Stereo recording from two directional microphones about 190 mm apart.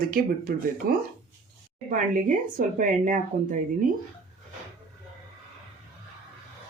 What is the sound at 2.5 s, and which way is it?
Speech, 45° right (ahead or behind).